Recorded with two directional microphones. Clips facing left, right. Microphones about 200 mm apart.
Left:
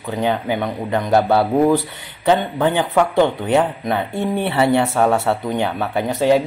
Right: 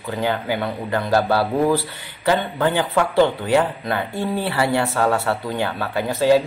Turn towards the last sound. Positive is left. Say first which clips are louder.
# left 1 dB
turn(degrees=20)  # may be behind; listen again after turning